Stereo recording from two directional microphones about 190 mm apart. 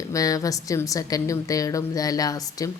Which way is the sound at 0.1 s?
15° left (ahead or behind).